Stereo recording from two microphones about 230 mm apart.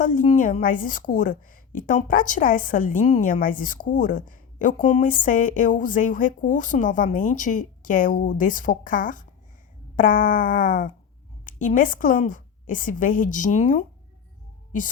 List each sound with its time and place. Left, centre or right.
0.0 s a woman's voice: left